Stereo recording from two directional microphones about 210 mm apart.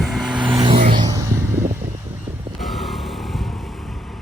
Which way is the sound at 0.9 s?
15° right (ahead or behind).